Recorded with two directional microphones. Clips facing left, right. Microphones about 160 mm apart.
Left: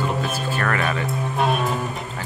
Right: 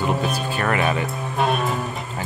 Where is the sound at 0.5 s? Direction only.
20° right (ahead or behind).